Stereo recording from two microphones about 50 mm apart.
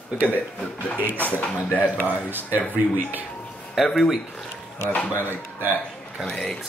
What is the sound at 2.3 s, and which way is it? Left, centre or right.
Speech, right.